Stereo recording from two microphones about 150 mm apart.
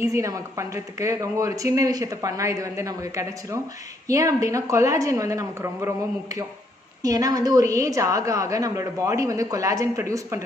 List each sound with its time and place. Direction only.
0.0 s a woman's voice: 20° right (ahead or behind)